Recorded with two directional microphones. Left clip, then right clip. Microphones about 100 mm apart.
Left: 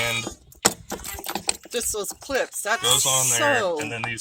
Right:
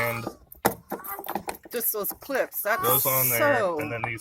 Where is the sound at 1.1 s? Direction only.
Centre (ahead or behind).